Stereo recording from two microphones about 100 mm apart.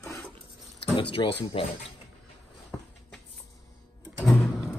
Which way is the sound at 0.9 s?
55° left (ahead or behind).